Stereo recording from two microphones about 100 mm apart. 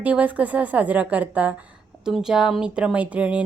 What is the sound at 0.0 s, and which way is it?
Speech, 15° right (ahead or behind).